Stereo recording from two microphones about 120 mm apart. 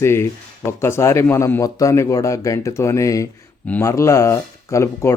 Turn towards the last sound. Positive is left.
turn(degrees=25)  # may be behind; listen again after turning